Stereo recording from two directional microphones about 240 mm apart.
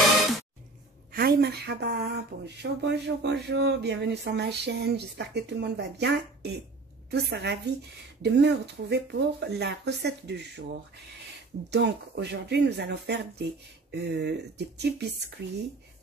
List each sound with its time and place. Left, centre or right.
1.1 s speech: right
11.7 s speech: right